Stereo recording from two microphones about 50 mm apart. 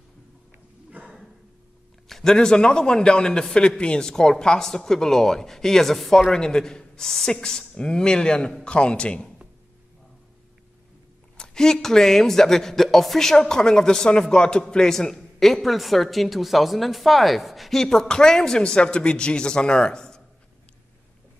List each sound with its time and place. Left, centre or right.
1.0 s a sound: right
2.0 s a woman's voice: centre
11.3 s a woman's voice: centre